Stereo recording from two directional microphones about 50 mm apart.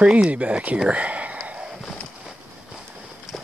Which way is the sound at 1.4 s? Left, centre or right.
Right.